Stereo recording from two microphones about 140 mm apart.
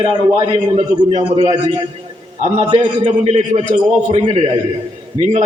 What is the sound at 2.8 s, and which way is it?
A man's voice, 50° right (ahead or behind).